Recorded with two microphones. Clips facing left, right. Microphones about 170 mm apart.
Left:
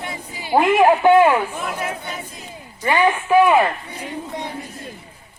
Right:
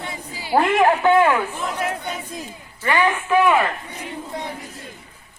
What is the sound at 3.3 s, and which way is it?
Speech, 10° left (ahead or behind).